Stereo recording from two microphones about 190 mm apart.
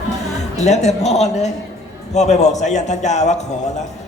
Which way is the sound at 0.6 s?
35° left (ahead or behind).